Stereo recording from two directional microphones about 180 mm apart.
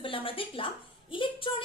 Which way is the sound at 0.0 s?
30° left (ahead or behind).